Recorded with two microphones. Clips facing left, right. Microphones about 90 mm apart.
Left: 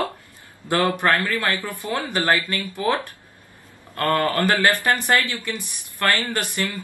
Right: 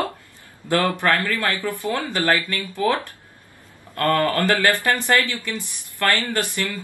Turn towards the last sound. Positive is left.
turn(degrees=20)  # may be behind; listen again after turning